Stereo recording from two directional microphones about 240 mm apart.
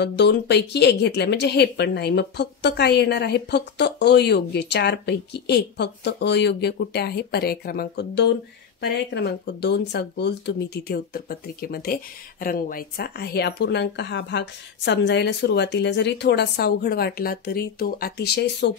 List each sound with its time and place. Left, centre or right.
0.0 s speech: left